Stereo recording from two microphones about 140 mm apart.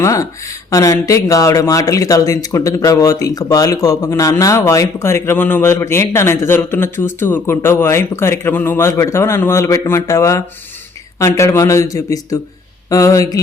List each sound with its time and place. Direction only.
0.0 s speech: 20° left (ahead or behind)